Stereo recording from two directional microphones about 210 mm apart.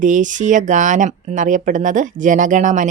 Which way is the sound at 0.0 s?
35° right (ahead or behind).